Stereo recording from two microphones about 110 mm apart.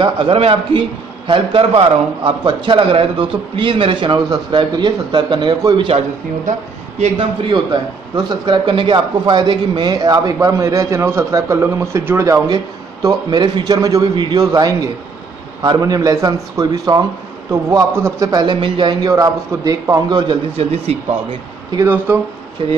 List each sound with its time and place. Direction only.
0.0 s a man's voice: 55° right (ahead or behind); by 5.9 s 40° right (ahead or behind)
7.2 s a man's voice: 40° right (ahead or behind); by 12.4 s 25° right (ahead or behind)
13.0 s a man's voice: 40° right (ahead or behind)
13.7 s a man's voice: 30° right (ahead or behind)
18.3 s a man's voice: 45° right (ahead or behind)
19.0 s a man's voice: 35° right (ahead or behind)
20.5 s speech: 70° right (ahead or behind)
21.8 s a man's voice: 20° right (ahead or behind)